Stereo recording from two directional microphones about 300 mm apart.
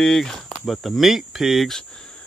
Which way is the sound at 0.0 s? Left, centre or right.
Centre.